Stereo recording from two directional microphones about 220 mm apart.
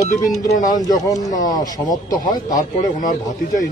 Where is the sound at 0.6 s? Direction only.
15° left (ahead or behind).